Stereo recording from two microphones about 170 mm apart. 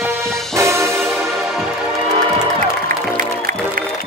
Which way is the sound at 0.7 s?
15° right (ahead or behind).